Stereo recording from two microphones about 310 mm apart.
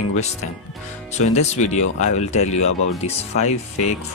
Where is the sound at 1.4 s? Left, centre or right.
Left.